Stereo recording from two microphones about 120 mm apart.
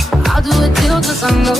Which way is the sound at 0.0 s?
Centre (ahead or behind).